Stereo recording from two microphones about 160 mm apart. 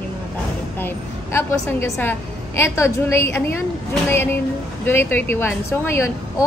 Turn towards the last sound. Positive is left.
turn(degrees=15)  # may be behind; listen again after turning